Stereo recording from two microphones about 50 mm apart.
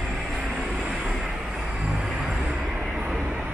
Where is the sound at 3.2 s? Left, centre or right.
Right.